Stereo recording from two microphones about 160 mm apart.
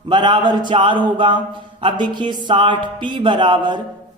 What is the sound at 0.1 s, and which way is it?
Speech, 30° right (ahead or behind).